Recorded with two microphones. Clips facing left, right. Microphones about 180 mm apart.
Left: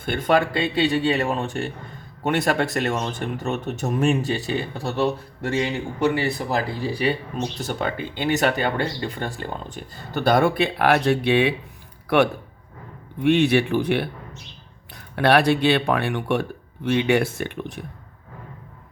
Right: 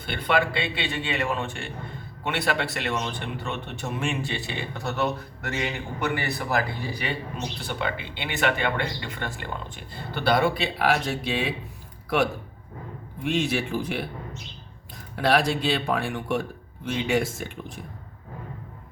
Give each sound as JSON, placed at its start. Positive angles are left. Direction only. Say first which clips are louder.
{"t": 0.0, "sound": "speech", "louder": "left 5 dB", "side_deg": 45}
{"t": 7.3, "sound": "speech", "louder": "left 5 dB", "side_deg": 45}
{"t": 15.1, "sound": "speech", "louder": "left 5 dB", "side_deg": 65}